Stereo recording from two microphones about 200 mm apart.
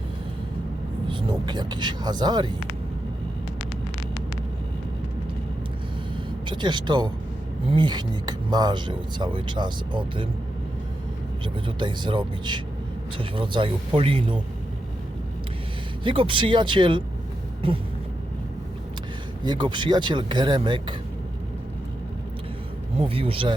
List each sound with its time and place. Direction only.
1.0 s speech: 25° right (ahead or behind)
6.5 s speech: 25° right (ahead or behind)
11.4 s speech: 25° right (ahead or behind)
16.0 s speech: 25° right (ahead or behind)
19.5 s speech: 25° right (ahead or behind)
23.0 s speech: 30° right (ahead or behind)